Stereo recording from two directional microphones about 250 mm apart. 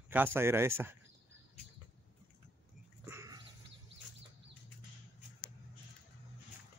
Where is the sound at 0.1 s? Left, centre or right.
Centre.